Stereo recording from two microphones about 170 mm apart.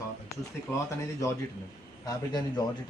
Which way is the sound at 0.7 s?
15° left (ahead or behind).